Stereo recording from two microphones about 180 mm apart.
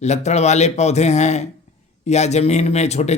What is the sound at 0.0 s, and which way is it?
Speech, 40° left (ahead or behind).